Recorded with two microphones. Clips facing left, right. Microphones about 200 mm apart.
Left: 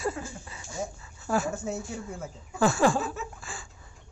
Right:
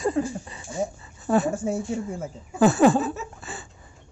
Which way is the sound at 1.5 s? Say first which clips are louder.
Right 7 dB; 30° right (ahead or behind).